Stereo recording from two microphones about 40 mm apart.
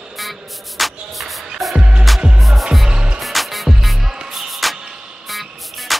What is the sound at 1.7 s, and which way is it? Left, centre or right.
Music, right.